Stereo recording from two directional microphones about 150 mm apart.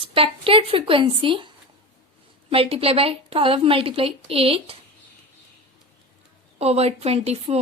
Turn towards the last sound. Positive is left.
turn(degrees=-45)  # may be behind; listen again after turning